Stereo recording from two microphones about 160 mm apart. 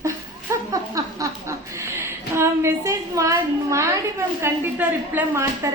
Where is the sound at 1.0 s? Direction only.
20° right (ahead or behind).